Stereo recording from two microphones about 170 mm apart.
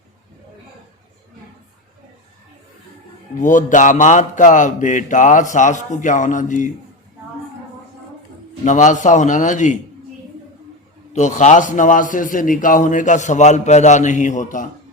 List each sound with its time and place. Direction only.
3.4 s a man's voice: 50° left (ahead or behind)
8.6 s a man's voice: 45° left (ahead or behind)
11.1 s a man's voice: 45° left (ahead or behind)